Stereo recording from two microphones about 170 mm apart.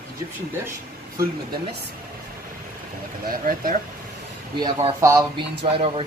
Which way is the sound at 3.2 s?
55° right (ahead or behind).